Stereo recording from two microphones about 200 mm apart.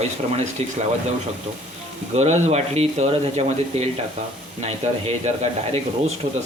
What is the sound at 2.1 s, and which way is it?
Speech, 35° right (ahead or behind).